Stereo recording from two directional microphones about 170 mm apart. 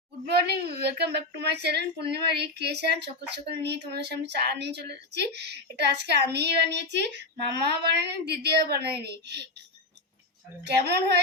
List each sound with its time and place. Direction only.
0.3 s speech: 70° right (ahead or behind)
7.7 s speech: 75° right (ahead or behind)
10.6 s speech: 75° right (ahead or behind)